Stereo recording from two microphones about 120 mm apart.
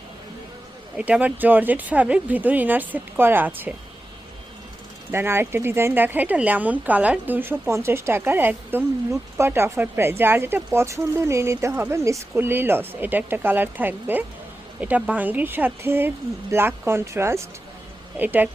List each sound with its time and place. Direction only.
0.9 s speech: 10° right (ahead or behind)
5.1 s a woman's voice: 20° right (ahead or behind)